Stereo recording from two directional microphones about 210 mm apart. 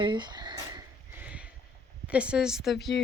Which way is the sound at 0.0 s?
20° right (ahead or behind).